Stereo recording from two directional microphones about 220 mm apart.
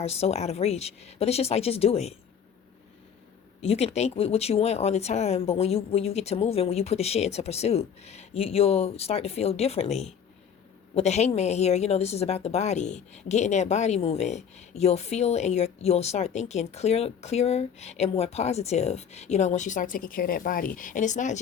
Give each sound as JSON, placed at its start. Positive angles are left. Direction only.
{"t": 0.0, "sound": "a woman's voice", "side_deg": 30}
{"t": 3.6, "sound": "a woman's voice", "side_deg": 25}